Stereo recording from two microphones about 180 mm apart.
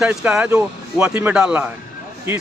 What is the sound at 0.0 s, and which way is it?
A man's voice, 5° right (ahead or behind).